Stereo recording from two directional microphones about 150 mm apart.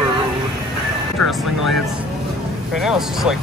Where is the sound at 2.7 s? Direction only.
5° right (ahead or behind).